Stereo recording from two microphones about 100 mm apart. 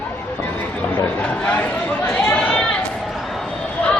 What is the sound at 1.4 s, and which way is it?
Chatter, 15° left (ahead or behind).